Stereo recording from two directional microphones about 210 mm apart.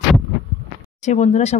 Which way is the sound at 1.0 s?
35° left (ahead or behind).